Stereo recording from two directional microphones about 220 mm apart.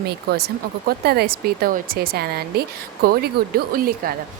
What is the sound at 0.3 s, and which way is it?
Speech, 45° right (ahead or behind).